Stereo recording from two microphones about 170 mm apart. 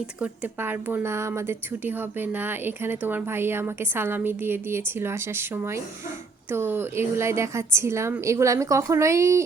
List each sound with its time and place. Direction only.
0.2 s speech: 10° right (ahead or behind)